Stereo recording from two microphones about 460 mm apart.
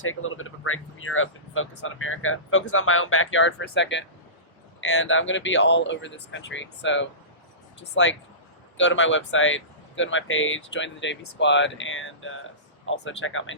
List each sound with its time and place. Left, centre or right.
0.0 s speech: left
8.8 s speech: left